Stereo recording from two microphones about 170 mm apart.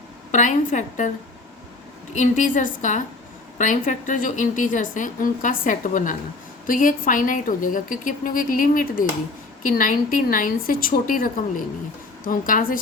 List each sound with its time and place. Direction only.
0.3 s a woman's voice: 45° left (ahead or behind)
2.1 s a woman's voice: 50° left (ahead or behind)